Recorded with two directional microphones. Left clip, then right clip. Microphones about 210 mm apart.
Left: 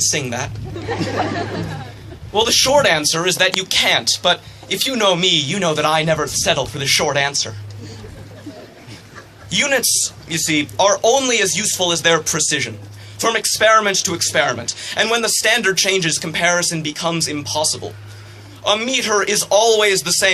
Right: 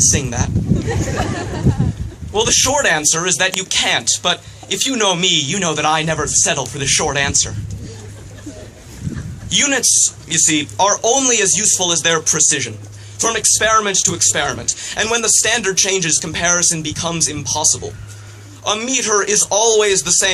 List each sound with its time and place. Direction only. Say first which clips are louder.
0.0 s speech: right 2 dB; 20° left (ahead or behind)
2.3 s speech: left 1 dB; 20° left (ahead or behind)
9.5 s speech: right 1 dB; 20° left (ahead or behind)